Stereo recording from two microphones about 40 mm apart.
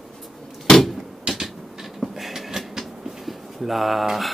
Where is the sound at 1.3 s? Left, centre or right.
Right.